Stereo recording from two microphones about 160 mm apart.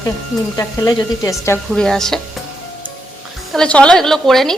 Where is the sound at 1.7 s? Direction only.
5° left (ahead or behind).